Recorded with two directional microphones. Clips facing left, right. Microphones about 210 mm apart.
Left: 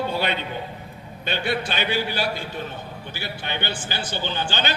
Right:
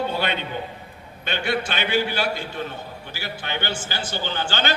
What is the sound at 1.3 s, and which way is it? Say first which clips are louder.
Speech: right 1 dB; 15° left (ahead or behind).